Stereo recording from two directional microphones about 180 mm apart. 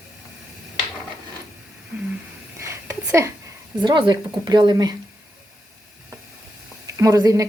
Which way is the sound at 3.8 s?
25° right (ahead or behind).